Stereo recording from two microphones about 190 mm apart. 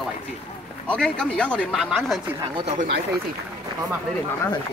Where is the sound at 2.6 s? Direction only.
35° right (ahead or behind).